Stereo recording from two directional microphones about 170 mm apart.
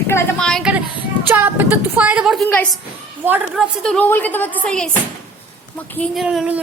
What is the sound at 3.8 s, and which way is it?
Speech, 5° left (ahead or behind).